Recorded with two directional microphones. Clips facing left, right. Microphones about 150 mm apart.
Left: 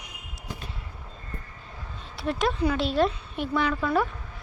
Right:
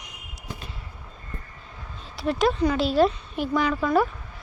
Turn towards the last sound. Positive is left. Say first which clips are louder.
# right 3 dB
turn(degrees=-10)  # may be behind; listen again after turning